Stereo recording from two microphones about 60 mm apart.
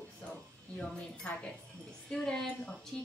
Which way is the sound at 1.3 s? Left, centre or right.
Left.